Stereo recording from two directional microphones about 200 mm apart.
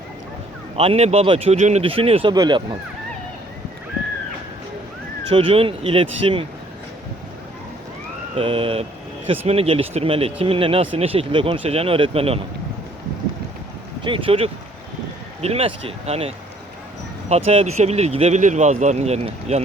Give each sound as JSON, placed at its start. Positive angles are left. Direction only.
{"t": 0.8, "sound": "speech", "side_deg": -30}
{"t": 5.3, "sound": "speech", "side_deg": -25}
{"t": 8.4, "sound": "speech", "side_deg": -25}
{"t": 14.0, "sound": "speech", "side_deg": -25}